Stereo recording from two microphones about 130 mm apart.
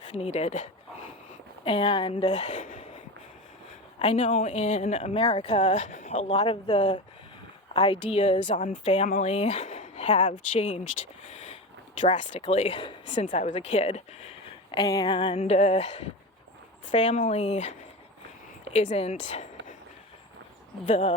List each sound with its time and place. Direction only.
0.1 s speech: 55° left (ahead or behind)
1.6 s speech: 45° left (ahead or behind)
2.3 s a sound: 60° left (ahead or behind)
3.9 s speech: 55° left (ahead or behind)
7.8 s speech: 40° left (ahead or behind)
8.4 s speech: 70° left (ahead or behind)
10.3 s speech: 70° left (ahead or behind)
11.3 s a sound: 55° left (ahead or behind)
11.9 s speech: 60° left (ahead or behind); by 13.1 s 40° left (ahead or behind)
13.1 s speech: 65° left (ahead or behind)
14.8 s speech: 30° left (ahead or behind); by 19.7 s 65° left (ahead or behind)
20.8 s speech: 65° left (ahead or behind)